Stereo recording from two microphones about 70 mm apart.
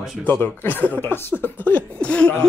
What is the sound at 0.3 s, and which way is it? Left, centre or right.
Speech, left.